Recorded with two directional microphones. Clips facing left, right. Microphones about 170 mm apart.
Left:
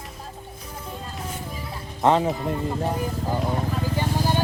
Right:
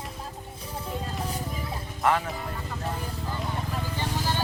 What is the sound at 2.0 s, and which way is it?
Speech, 25° left (ahead or behind).